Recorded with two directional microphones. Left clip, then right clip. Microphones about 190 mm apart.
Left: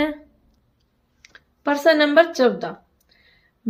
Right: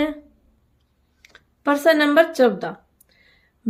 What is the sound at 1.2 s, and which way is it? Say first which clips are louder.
Speech: left 1 dB; 5° right (ahead or behind).